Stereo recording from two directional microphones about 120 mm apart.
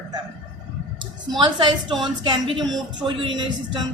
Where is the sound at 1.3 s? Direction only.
40° right (ahead or behind).